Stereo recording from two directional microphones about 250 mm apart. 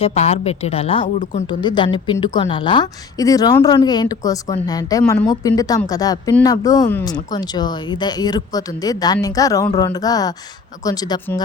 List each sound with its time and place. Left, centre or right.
0.0 s a woman's voice: left